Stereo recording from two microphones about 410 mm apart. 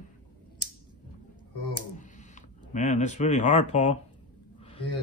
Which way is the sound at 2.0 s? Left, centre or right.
Centre.